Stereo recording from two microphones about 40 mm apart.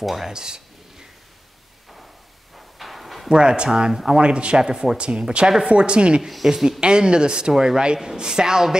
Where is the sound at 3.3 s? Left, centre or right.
Right.